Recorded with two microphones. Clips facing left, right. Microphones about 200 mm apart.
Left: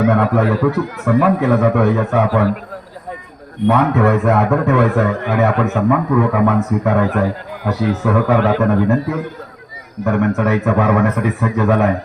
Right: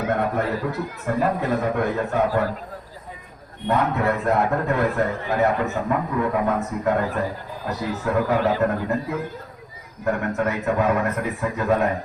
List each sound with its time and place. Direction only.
0.0 s a man's voice: 75° left (ahead or behind)
3.7 s a man's voice: 75° left (ahead or behind)